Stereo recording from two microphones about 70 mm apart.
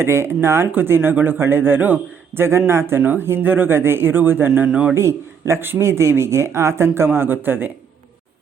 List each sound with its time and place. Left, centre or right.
0.0 s a man's voice: right
4.7 s a man's voice: centre
4.9 s a man's voice: right